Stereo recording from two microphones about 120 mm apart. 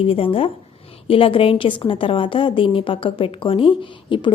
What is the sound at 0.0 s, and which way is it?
A woman's voice, 50° left (ahead or behind).